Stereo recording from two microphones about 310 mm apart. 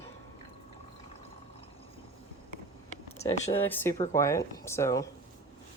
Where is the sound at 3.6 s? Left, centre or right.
Centre.